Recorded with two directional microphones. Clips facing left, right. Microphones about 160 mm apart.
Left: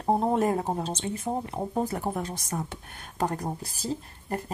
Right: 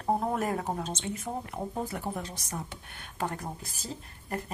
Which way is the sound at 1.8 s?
45° left (ahead or behind).